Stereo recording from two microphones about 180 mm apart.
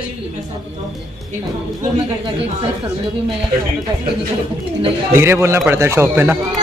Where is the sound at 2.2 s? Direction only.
30° right (ahead or behind).